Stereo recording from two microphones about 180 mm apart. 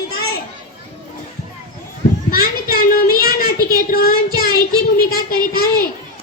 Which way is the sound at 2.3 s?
55° left (ahead or behind).